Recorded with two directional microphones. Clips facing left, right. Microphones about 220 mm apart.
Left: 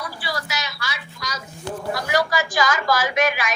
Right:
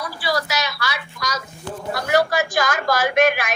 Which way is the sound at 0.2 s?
90° right.